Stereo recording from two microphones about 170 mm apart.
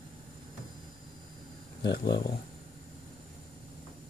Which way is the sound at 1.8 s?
80° left.